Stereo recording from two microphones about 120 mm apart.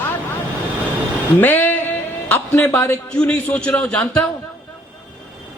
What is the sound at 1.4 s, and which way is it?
Music, 15° left (ahead or behind).